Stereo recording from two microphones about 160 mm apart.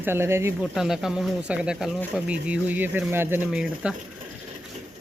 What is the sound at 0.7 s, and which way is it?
Speech, centre (ahead or behind).